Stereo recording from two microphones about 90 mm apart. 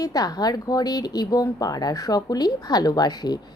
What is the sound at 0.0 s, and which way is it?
Speech, 45° left (ahead or behind).